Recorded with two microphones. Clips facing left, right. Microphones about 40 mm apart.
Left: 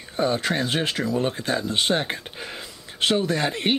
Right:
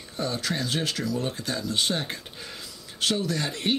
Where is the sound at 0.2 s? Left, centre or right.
Left.